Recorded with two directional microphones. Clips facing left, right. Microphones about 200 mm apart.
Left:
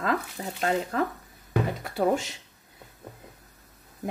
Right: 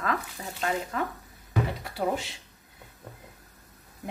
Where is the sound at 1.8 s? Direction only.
45° left (ahead or behind).